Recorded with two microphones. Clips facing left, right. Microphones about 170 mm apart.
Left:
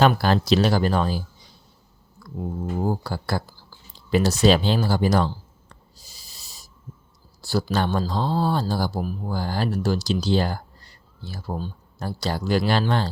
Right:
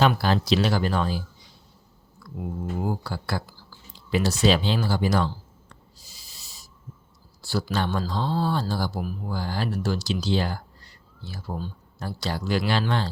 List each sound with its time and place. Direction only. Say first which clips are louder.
0.0 s speech: left 3 dB; 50° left (ahead or behind)
2.4 s speech: left 3 dB; 35° left (ahead or behind)
4.1 s a sound: left 3 dB; 45° left (ahead or behind)
7.4 s speech: left 3 dB; 40° left (ahead or behind)